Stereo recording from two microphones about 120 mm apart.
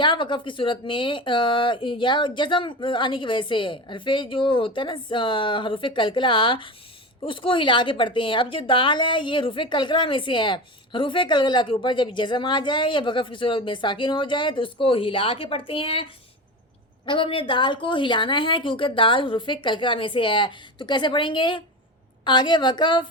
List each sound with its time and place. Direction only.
0.0 s a woman's voice: 40° left (ahead or behind)
17.1 s a woman's voice: 45° left (ahead or behind)